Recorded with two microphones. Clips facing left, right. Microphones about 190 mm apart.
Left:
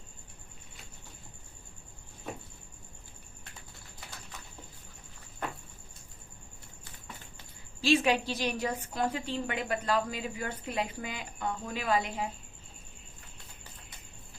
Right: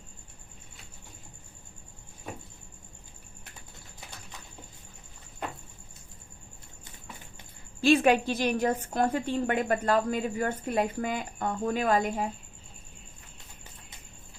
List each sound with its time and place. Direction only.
7.8 s a woman's voice: 55° right (ahead or behind)